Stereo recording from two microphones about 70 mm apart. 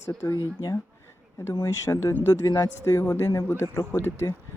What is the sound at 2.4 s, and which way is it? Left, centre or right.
Speech, left.